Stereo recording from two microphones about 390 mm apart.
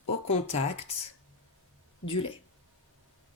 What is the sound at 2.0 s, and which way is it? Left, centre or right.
Speech, left.